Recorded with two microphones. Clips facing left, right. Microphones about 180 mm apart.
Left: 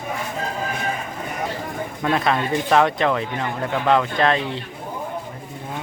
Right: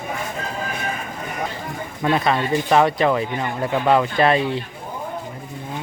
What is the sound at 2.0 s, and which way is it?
Speech, centre (ahead or behind).